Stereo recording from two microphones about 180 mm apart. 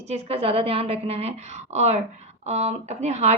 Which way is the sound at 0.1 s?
35° right (ahead or behind).